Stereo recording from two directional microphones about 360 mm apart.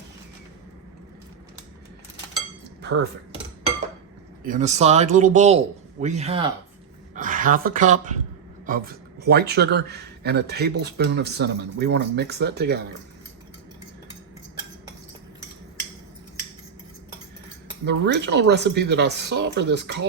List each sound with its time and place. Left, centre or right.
2.8 s speech: right
4.4 s speech: centre
17.8 s speech: right